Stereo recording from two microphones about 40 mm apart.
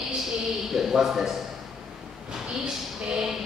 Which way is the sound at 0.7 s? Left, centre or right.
Centre.